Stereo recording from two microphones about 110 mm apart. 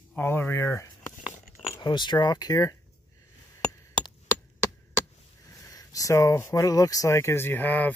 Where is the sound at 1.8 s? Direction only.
45° left (ahead or behind).